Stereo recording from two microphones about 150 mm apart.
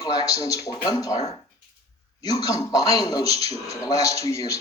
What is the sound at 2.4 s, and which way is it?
Speech, 25° left (ahead or behind).